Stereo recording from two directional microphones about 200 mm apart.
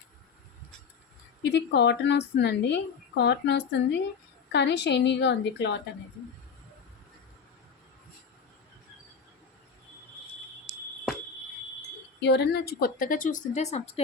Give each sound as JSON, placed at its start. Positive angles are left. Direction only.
{"t": 1.4, "sound": "a woman's voice", "side_deg": 60}
{"t": 12.2, "sound": "a woman's voice", "side_deg": 55}